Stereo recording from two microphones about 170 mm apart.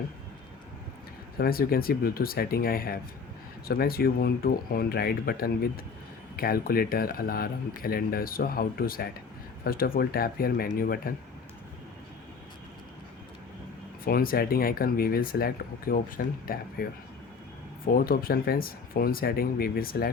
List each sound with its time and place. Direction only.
1.4 s speech: 60° left (ahead or behind)
14.0 s speech: 60° left (ahead or behind)